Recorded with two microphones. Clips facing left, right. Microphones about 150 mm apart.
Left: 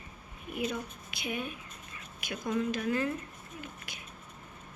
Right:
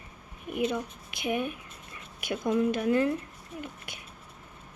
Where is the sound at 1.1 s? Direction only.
50° right (ahead or behind).